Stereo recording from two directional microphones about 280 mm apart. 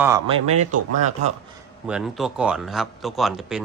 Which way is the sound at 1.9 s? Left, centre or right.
Centre.